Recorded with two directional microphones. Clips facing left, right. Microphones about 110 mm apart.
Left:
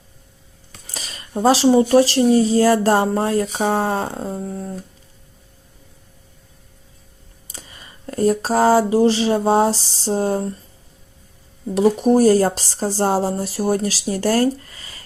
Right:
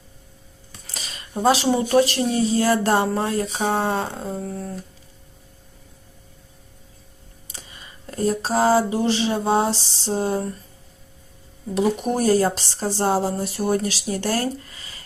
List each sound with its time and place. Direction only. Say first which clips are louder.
1.3 s speech: left 5 dB; 30° left (ahead or behind)
8.1 s speech: left 4 dB; 40° left (ahead or behind)
11.8 s speech: left 7 dB; 35° left (ahead or behind)